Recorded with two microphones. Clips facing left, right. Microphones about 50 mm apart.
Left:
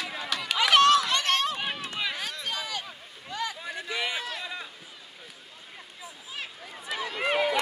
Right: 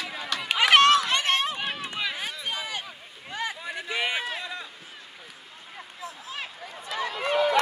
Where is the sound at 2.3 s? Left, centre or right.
Centre.